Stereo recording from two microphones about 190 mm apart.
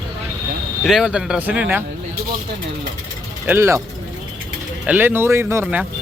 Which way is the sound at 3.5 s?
15° right (ahead or behind).